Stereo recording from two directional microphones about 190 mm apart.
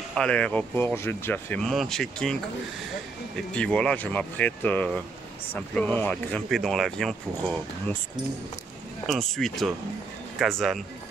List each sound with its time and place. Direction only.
0.1 s speech: 5° left (ahead or behind)
3.5 s speech: 5° left (ahead or behind)
9.0 s speech: centre (ahead or behind)